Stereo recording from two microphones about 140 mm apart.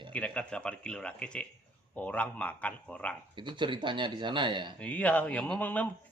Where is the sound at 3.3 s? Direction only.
35° right (ahead or behind).